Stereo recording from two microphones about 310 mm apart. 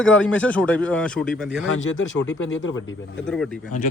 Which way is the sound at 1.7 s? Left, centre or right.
Left.